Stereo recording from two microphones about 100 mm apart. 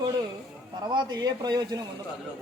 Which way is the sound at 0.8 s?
50° right (ahead or behind).